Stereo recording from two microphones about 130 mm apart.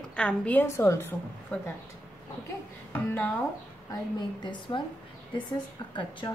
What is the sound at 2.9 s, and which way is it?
Speech, 15° left (ahead or behind).